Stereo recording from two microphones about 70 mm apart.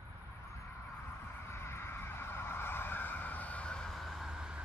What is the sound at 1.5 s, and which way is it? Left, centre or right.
Vehicle, left.